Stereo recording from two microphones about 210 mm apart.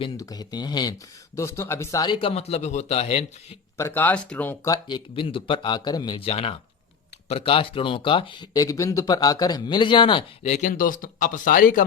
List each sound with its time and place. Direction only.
0.0 s speech: 15° left (ahead or behind)
3.8 s speech: 10° left (ahead or behind); by 11.9 s 40° left (ahead or behind)